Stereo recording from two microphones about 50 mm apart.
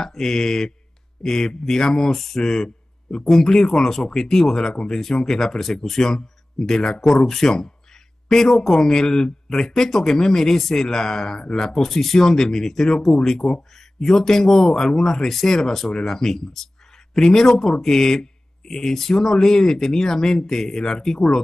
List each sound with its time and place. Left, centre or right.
0.0 s a man's voice: centre